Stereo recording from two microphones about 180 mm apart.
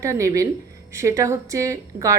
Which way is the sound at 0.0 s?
15° right (ahead or behind).